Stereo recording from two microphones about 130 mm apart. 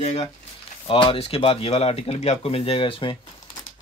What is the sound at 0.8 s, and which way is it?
Speech, 40° left (ahead or behind).